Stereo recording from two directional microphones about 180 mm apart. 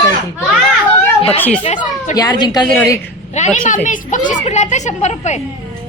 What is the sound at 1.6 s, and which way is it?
Speech, 35° left (ahead or behind).